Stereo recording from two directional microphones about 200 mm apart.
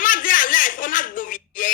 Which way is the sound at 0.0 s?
40° left (ahead or behind).